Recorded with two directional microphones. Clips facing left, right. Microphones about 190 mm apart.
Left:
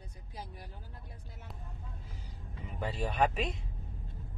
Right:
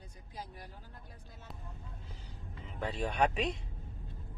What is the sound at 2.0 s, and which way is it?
Vehicle, 10° left (ahead or behind).